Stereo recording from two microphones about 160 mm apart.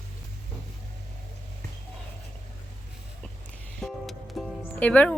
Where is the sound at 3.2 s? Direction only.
10° left (ahead or behind).